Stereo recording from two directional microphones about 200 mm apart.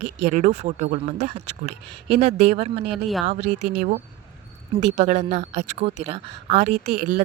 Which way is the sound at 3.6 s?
40° right (ahead or behind).